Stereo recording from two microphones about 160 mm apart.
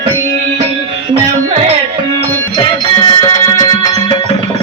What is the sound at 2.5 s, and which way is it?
Music, 25° left (ahead or behind).